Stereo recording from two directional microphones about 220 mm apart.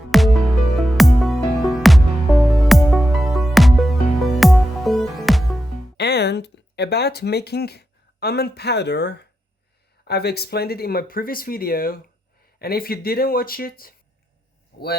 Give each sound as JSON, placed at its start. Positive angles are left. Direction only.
{"t": 0.1, "sound": "music", "side_deg": 0}
{"t": 6.0, "sound": "speech", "side_deg": 50}